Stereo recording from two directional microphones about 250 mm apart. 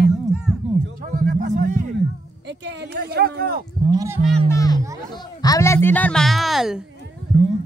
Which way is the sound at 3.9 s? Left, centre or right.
Centre.